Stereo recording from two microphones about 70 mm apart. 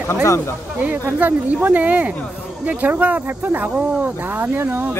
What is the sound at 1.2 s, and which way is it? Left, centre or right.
Speech, right.